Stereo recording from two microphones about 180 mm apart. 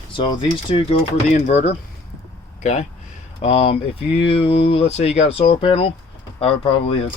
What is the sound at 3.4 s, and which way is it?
Speech, 30° left (ahead or behind).